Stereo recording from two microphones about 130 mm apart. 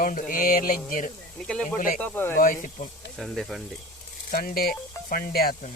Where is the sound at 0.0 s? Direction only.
90° left.